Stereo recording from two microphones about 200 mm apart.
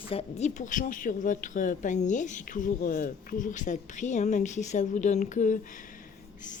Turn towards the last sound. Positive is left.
turn(degrees=40)  # may be behind; listen again after turning